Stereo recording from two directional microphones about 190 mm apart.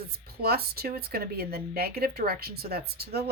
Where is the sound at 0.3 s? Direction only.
55° right (ahead or behind).